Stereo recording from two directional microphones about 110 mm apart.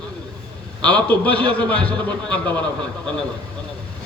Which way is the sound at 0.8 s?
15° left (ahead or behind).